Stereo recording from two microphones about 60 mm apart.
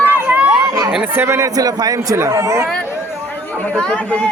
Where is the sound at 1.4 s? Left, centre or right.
Right.